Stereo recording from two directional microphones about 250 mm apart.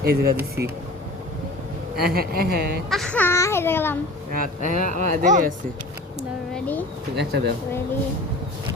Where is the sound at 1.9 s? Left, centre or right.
Right.